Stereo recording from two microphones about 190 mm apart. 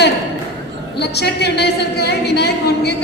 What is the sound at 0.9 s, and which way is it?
A woman's voice, 60° left (ahead or behind).